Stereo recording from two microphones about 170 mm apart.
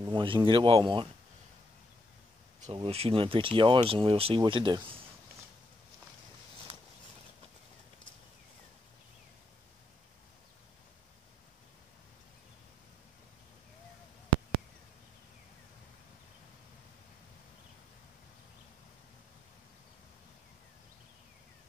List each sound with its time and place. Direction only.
0.1 s speech: 30° right (ahead or behind)
2.7 s speech: 35° right (ahead or behind)